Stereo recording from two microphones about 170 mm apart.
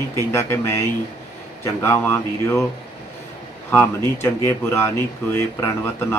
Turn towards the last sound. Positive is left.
turn(degrees=15)  # may be behind; listen again after turning